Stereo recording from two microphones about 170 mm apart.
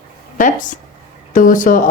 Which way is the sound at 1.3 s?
50° left (ahead or behind).